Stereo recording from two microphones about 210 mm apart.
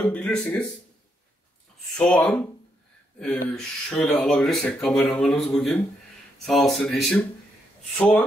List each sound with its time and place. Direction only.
0.0 s speech: 5° left (ahead or behind)
2.0 s speech: 5° left (ahead or behind)